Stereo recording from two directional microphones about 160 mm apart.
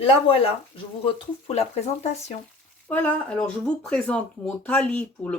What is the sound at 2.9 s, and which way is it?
Speech, 10° left (ahead or behind).